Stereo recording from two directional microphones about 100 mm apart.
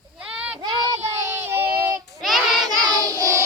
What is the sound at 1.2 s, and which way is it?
Child singing, 25° right (ahead or behind).